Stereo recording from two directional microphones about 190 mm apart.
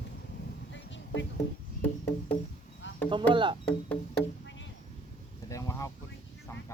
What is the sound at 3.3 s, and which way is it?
Speech, 25° right (ahead or behind).